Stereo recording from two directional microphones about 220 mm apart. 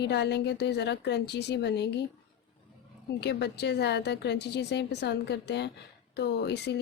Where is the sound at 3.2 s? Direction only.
50° left (ahead or behind).